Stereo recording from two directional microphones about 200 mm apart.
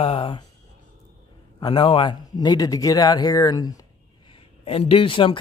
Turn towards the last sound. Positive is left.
turn(degrees=25)  # may be behind; listen again after turning